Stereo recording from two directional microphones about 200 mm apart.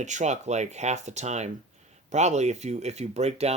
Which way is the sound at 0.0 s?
35° right (ahead or behind).